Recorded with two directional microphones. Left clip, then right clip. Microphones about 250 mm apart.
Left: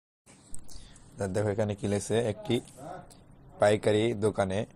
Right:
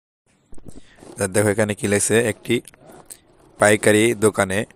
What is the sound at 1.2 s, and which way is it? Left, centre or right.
Speech, right.